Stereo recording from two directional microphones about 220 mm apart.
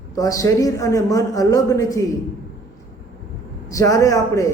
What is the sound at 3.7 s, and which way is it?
Speech, 15° left (ahead or behind).